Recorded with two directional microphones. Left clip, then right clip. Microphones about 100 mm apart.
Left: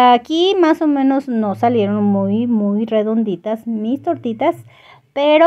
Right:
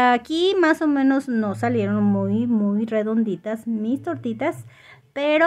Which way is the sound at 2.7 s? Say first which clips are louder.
Left 8 dB; 30° left (ahead or behind).